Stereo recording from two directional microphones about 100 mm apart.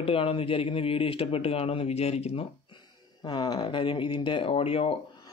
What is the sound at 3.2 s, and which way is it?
Speech, 45° left (ahead or behind).